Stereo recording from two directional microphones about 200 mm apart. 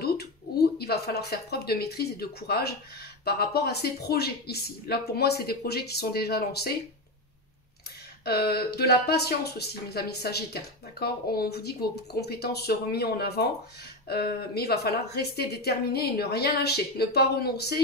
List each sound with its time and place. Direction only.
0.7 s speech: 55° left (ahead or behind)
8.3 s speech: 50° left (ahead or behind)